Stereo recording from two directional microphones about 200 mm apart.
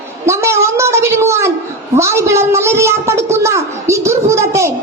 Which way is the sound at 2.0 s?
15° right (ahead or behind).